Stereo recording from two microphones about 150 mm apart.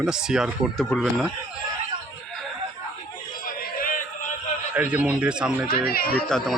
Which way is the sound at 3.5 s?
70° left (ahead or behind).